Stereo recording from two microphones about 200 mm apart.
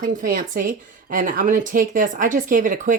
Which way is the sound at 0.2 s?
45° right (ahead or behind).